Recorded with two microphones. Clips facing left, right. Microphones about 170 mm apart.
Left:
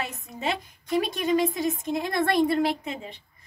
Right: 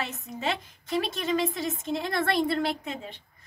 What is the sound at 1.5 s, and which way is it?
Speech, 15° left (ahead or behind).